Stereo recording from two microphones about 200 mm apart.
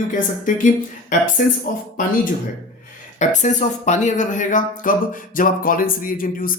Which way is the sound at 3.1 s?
35° left (ahead or behind).